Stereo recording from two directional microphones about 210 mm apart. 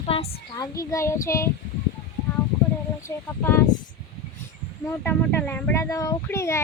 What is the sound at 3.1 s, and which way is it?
Speech, 15° left (ahead or behind).